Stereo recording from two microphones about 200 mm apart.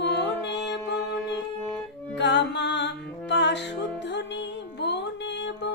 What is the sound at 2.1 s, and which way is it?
Music, 60° left (ahead or behind).